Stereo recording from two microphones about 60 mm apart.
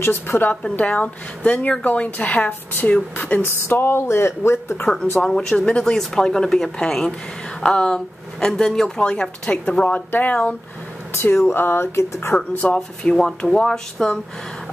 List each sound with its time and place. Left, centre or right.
0.0 s a woman's voice: left
0.7 s speech: left
3.6 s speech: left
5.2 s speech: centre
9.8 s speech: left
11.1 s speech: left
12.4 s speech: centre